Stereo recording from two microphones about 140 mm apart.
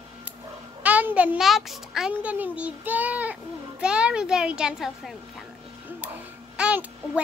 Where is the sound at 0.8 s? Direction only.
10° right (ahead or behind).